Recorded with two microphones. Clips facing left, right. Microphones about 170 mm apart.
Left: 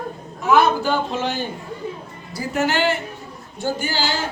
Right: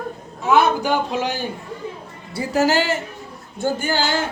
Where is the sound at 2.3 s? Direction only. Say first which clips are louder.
Right 3 dB; 35° right (ahead or behind).